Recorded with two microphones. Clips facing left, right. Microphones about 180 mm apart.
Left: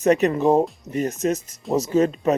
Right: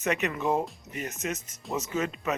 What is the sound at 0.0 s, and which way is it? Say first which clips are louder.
Speech: left 11 dB; 35° left (ahead or behind).